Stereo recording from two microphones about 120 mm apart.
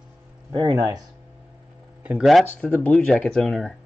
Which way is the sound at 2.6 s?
15° left (ahead or behind).